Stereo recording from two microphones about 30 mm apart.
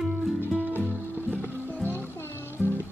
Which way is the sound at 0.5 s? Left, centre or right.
Right.